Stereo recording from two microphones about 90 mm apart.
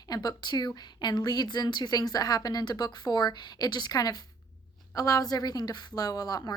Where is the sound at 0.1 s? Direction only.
45° left (ahead or behind).